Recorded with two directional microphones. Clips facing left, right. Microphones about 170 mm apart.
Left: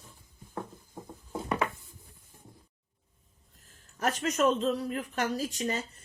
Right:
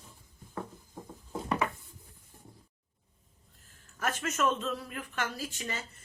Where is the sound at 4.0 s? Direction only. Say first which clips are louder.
Left 4 dB; 35° left (ahead or behind).